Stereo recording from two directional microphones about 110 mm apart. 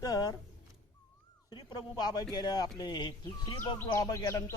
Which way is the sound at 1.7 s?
40° left (ahead or behind).